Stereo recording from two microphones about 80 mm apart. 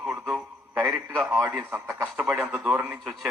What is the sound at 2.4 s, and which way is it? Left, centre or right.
Speech, centre.